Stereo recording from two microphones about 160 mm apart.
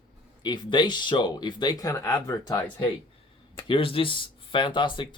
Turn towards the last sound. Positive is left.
turn(degrees=30)  # may be behind; listen again after turning